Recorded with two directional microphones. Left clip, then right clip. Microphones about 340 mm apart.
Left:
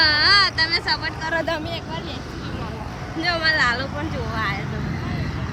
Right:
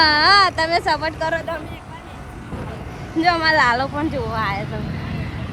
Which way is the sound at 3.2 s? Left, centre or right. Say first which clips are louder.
Right 4 dB; centre.